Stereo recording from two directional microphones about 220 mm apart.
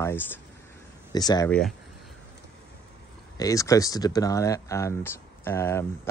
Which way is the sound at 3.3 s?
15° left (ahead or behind).